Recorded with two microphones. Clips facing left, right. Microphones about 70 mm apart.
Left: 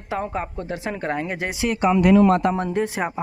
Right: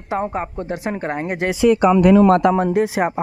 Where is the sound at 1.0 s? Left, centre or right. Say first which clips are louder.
Right 2 dB; right.